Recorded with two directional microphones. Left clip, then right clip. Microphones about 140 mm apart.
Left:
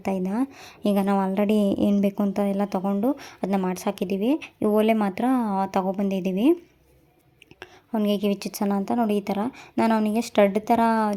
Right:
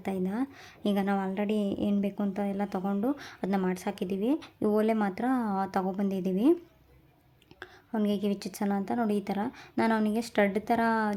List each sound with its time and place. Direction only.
0.0 s a woman's voice: 25° left (ahead or behind)
8.0 s a woman's voice: 25° left (ahead or behind)